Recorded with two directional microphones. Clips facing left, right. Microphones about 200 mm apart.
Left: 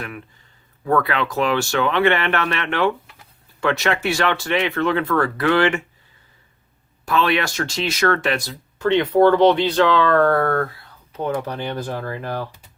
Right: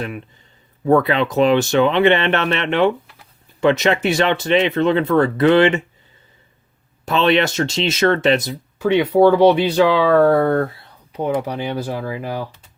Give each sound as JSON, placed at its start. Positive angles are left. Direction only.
{"t": 0.9, "sound": "speech", "side_deg": -20}
{"t": 7.0, "sound": "speech", "side_deg": -25}
{"t": 8.8, "sound": "speech", "side_deg": -10}